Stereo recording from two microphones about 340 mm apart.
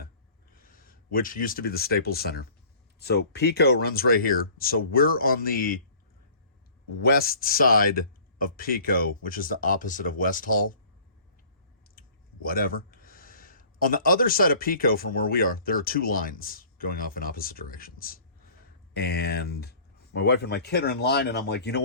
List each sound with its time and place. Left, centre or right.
0.5 s speech: left
7.0 s speech: left
11.9 s speech: left